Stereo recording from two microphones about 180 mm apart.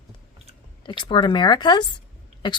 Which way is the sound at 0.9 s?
25° left (ahead or behind).